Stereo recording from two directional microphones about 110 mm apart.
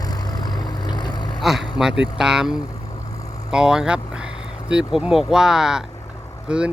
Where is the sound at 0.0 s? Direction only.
40° left (ahead or behind).